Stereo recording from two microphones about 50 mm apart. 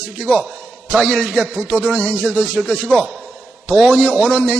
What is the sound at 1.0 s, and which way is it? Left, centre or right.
Speech, centre.